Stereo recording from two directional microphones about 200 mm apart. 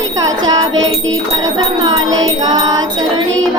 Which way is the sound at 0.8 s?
75° right (ahead or behind).